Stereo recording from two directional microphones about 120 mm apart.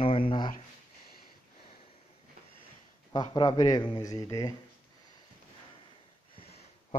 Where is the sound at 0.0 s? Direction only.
50° left (ahead or behind).